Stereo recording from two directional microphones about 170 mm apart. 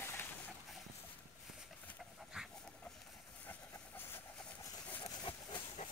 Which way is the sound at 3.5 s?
15° left (ahead or behind).